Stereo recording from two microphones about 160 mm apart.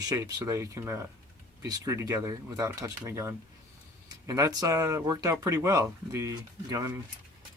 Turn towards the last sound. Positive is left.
turn(degrees=-20)  # may be behind; listen again after turning